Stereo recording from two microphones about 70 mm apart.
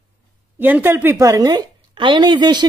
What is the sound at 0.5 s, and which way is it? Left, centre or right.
Speech, right.